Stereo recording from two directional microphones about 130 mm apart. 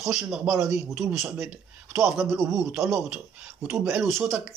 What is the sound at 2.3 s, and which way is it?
Speech, 25° right (ahead or behind).